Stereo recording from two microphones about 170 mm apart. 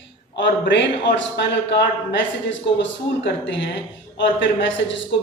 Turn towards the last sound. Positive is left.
turn(degrees=90)